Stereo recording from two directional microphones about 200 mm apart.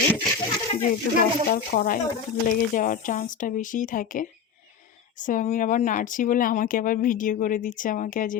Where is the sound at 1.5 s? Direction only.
40° left (ahead or behind).